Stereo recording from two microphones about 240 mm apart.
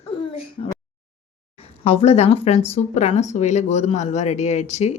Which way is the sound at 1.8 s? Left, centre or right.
Left.